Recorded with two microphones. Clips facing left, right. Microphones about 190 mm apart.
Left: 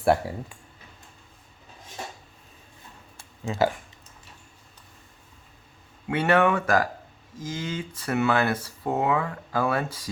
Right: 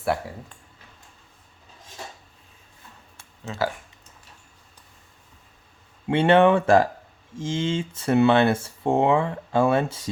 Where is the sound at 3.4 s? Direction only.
15° left (ahead or behind).